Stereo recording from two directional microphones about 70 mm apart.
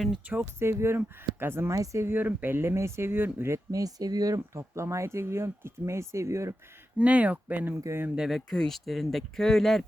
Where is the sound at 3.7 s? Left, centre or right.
Right.